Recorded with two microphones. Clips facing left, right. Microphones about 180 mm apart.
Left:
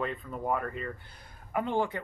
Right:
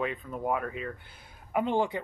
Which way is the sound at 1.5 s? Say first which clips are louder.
Right 2 dB; 20° right (ahead or behind).